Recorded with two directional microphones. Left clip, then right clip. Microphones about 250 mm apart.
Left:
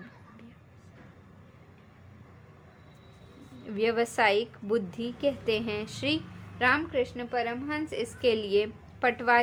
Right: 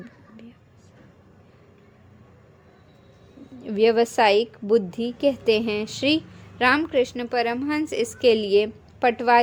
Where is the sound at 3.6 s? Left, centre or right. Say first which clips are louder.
Right 9 dB; right.